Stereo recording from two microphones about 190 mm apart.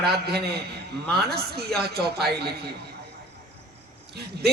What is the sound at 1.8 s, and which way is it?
Speech, 55° right (ahead or behind).